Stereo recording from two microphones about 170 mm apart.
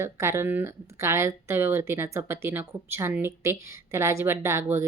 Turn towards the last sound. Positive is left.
turn(degrees=-15)  # may be behind; listen again after turning